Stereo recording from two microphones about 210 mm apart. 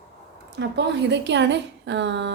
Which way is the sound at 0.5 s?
55° right (ahead or behind).